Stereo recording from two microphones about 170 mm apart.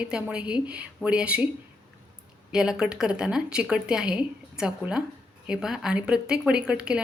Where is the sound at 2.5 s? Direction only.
5° right (ahead or behind).